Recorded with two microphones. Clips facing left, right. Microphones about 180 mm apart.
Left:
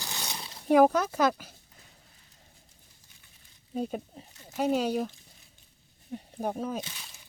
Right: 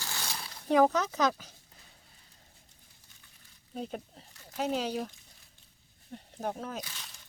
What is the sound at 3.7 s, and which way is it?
Speech, 15° left (ahead or behind).